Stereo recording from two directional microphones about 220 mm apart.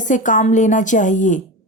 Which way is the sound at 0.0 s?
35° left (ahead or behind).